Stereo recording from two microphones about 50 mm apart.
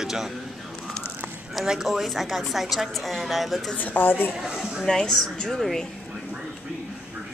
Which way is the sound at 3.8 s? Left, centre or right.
Left.